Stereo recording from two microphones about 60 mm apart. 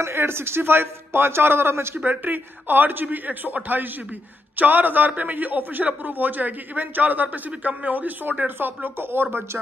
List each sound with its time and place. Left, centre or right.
0.0 s speech: right
2.0 s a man's voice: right